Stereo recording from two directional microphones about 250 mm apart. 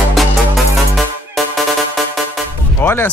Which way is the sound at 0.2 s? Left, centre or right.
Centre.